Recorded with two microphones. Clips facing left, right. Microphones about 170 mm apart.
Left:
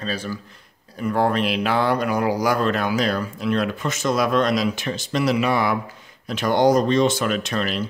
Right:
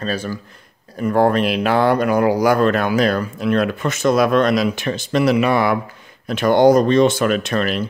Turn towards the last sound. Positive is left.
turn(degrees=-55)  # may be behind; listen again after turning